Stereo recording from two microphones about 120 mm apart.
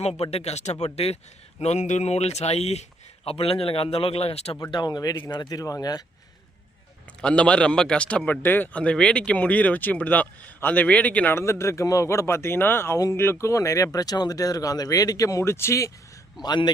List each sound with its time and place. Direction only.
0.0 s a man's voice: 60° left (ahead or behind)
4.7 s speech: 35° left (ahead or behind)
7.2 s a man's voice: 10° left (ahead or behind)
11.3 s a man's voice: 25° left (ahead or behind)
16.4 s speech: 35° left (ahead or behind)